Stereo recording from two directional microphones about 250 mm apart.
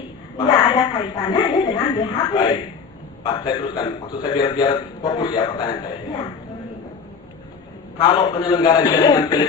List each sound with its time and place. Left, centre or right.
0.3 s a man's voice: centre
7.9 s a man's voice: centre